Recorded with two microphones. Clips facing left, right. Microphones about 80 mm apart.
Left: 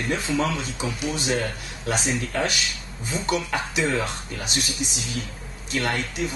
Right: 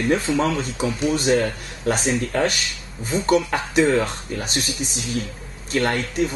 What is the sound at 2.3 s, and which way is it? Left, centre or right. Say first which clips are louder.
Speech: right 4 dB; right.